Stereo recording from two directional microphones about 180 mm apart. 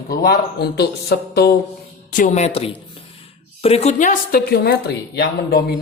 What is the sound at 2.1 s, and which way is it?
A woman's voice, 40° left (ahead or behind).